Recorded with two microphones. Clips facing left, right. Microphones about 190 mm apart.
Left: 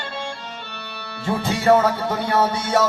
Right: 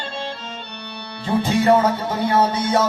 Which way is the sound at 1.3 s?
20° right (ahead or behind).